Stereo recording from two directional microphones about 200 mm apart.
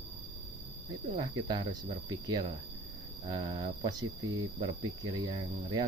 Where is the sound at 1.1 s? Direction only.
20° right (ahead or behind).